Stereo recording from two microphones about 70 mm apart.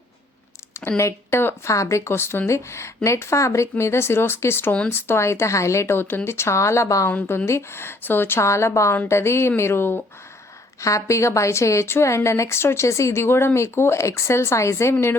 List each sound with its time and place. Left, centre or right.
0.9 s a woman's voice: left
7.1 s speech: left
10.8 s a woman's voice: left